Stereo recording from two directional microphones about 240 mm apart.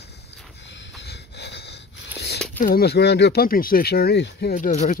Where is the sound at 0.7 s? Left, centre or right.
Left.